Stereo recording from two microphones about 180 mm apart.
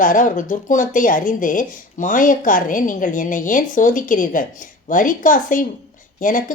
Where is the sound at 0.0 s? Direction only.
50° left (ahead or behind).